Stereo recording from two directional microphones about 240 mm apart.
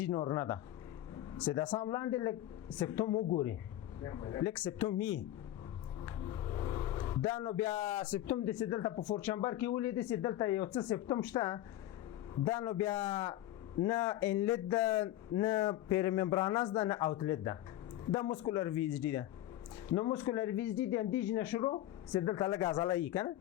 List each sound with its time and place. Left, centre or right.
0.1 s speech: centre
6.1 s music: left
7.3 s speech: centre
7.7 s speech: left
8.1 s speech: centre
15.4 s speech: left